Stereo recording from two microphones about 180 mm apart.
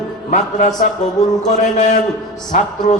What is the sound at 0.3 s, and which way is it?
Music, 40° left (ahead or behind).